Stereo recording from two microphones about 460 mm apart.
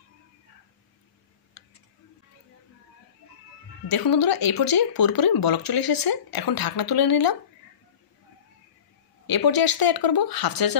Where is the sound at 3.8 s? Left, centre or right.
Left.